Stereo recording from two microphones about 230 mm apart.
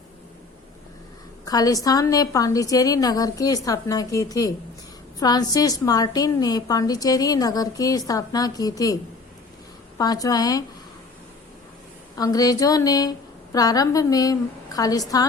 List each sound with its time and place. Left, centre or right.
1.5 s a woman's voice: centre
10.0 s a woman's voice: centre
12.1 s speech: centre